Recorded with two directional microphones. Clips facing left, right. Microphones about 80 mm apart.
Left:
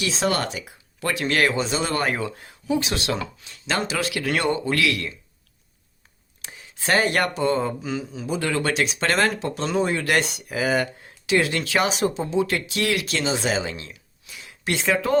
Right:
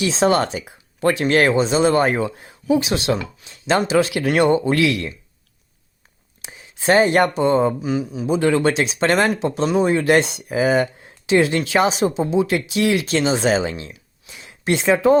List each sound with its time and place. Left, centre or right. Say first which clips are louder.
0.0 s speech: right 7 dB; right
6.4 s speech: right 8 dB; right
7.8 s speech: right 7 dB; centre
8.3 s speech: right 7 dB; right